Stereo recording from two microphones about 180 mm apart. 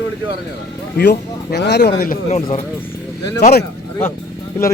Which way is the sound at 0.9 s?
65° left (ahead or behind).